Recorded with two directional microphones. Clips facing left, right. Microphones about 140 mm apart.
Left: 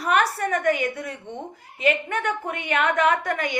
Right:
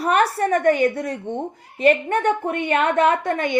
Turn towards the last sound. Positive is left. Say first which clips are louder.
# right 3 dB
turn(degrees=-25)  # may be behind; listen again after turning